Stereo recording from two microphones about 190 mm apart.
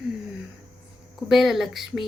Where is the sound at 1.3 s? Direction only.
Centre (ahead or behind).